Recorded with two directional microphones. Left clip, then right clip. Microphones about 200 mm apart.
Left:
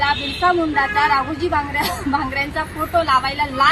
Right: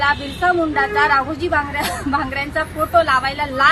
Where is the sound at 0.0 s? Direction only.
25° right (ahead or behind).